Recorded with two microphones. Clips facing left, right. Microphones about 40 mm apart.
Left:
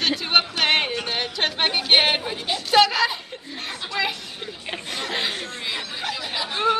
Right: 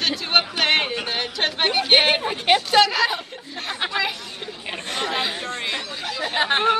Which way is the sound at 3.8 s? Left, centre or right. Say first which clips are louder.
Right 8 dB; right.